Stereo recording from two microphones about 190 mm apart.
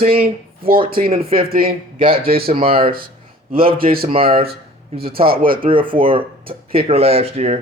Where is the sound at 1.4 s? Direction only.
50° right (ahead or behind).